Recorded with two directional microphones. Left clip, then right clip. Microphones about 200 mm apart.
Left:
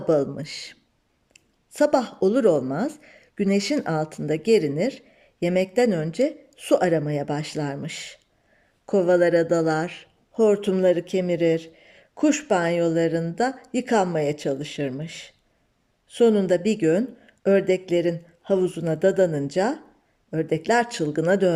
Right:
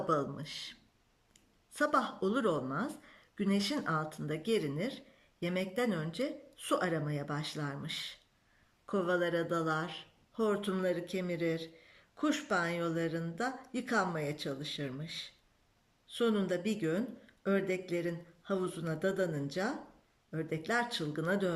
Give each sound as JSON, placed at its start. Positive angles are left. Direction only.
{"t": 0.1, "sound": "speech", "side_deg": 30}